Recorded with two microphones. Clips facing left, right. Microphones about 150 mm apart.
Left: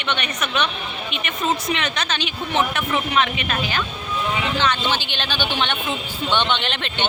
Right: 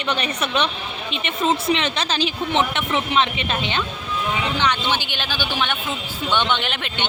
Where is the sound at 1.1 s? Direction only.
30° right (ahead or behind).